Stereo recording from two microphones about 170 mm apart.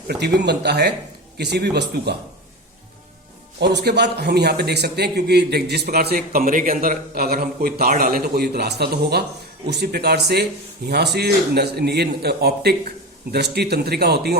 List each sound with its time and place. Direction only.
0.1 s a man's voice: 80° right
3.6 s a man's voice: 80° right